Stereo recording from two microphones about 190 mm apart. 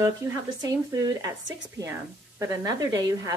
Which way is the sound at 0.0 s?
15° right (ahead or behind).